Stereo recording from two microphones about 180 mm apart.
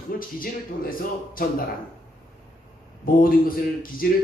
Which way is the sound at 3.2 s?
50° left (ahead or behind).